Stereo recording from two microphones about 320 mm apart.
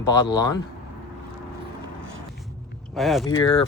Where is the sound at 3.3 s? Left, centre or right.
Centre.